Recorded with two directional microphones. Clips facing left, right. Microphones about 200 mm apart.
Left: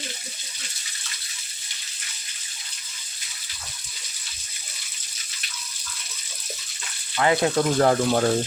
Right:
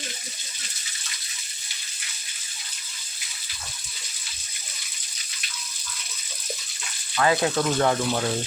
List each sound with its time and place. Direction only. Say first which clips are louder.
7.2 s speech: left 1 dB; 25° left (ahead or behind); by 8.3 s 45° left (ahead or behind)